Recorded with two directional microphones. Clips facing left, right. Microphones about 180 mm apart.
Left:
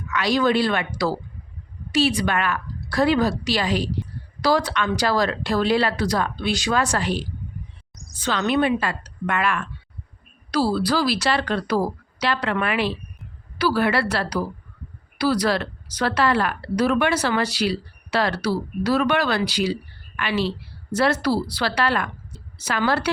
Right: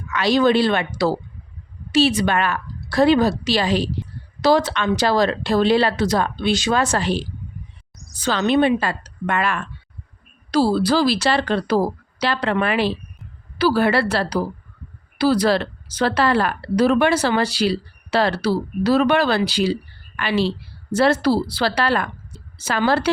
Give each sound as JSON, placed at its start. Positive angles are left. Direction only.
{"t": 0.1, "sound": "a woman's voice", "side_deg": -25}